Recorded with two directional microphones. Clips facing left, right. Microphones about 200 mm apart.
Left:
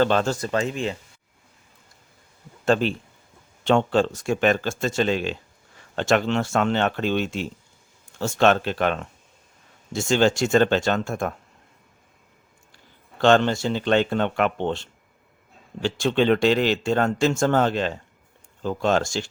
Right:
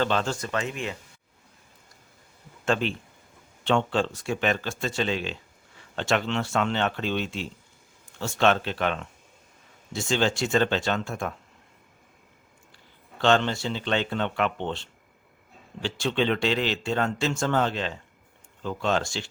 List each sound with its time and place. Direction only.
0.0 s speech: 45° left (ahead or behind); by 0.9 s 30° left (ahead or behind)
2.6 s speech: 40° left (ahead or behind)
13.1 s speech: 50° left (ahead or behind)